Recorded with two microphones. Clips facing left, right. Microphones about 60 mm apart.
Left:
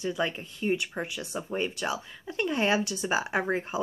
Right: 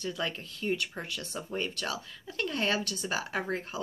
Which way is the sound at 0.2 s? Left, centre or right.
Centre.